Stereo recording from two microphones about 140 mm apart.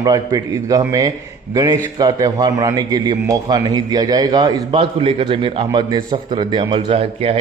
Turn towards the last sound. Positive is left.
turn(degrees=-40)  # may be behind; listen again after turning